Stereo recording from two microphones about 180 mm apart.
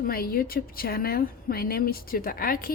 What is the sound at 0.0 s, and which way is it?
A woman's voice, 55° left (ahead or behind).